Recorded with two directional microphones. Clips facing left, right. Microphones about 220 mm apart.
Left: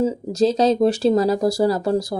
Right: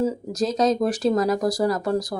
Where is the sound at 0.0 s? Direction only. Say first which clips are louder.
Left 5 dB; 30° left (ahead or behind).